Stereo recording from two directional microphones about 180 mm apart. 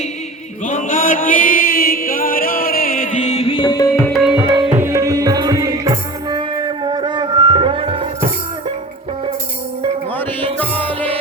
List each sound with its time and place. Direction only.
0.6 s chant: 45° left (ahead or behind); by 3.8 s 25° left (ahead or behind)
4.1 s music: 5° right (ahead or behind)
4.8 s music: 15° right (ahead or behind)